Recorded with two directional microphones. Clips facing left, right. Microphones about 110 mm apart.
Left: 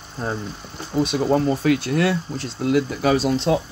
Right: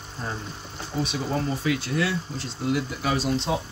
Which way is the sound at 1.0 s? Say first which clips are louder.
Left 8 dB; 55° left (ahead or behind).